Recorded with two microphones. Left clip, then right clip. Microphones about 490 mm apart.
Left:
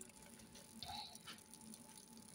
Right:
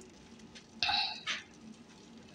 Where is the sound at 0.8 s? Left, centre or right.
Left.